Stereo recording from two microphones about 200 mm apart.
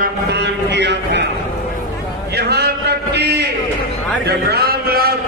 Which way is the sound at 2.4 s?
55° right (ahead or behind).